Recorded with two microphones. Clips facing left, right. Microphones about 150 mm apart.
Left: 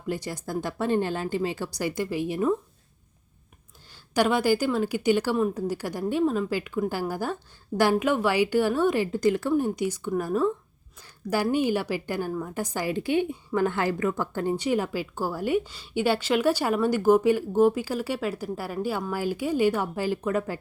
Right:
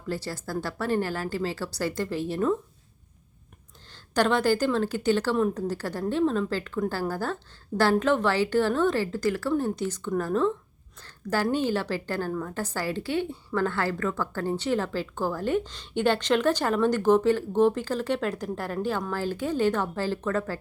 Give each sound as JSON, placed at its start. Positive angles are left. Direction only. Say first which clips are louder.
{"t": 0.1, "sound": "a woman's voice", "louder": "left 1 dB", "side_deg": 15}
{"t": 4.1, "sound": "a woman's voice", "louder": "left 1 dB", "side_deg": 10}